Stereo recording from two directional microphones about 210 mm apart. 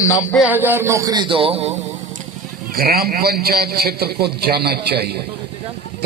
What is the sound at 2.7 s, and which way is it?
A man's voice, 45° right (ahead or behind).